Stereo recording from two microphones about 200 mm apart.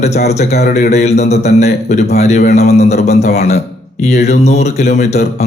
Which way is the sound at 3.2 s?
50° left (ahead or behind).